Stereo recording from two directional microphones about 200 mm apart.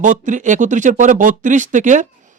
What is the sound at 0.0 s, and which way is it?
Speech, 40° right (ahead or behind).